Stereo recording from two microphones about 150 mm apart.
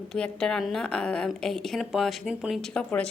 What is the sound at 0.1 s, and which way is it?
A woman's voice, 5° left (ahead or behind).